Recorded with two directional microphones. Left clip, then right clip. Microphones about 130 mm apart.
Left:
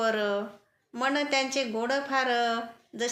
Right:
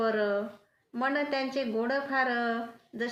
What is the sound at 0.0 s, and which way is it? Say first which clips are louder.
A woman's voice: left 1 dB; 25° left (ahead or behind).